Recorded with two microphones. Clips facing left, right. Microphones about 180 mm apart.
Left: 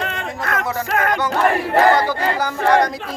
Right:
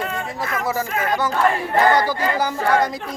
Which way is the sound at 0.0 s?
70° left (ahead or behind).